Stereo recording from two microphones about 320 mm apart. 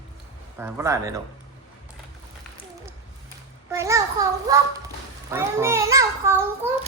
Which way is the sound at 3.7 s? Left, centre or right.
Centre.